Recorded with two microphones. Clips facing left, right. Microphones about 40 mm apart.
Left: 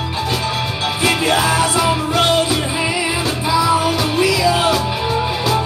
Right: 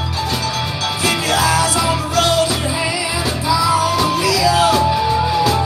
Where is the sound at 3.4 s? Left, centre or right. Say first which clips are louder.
Even; left.